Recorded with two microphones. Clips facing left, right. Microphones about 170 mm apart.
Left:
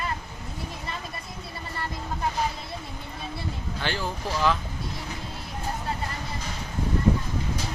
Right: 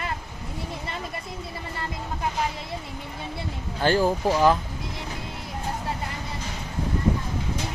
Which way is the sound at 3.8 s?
45° right (ahead or behind).